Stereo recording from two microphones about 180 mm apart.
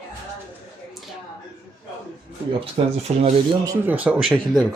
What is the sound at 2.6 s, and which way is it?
Speech, 35° right (ahead or behind).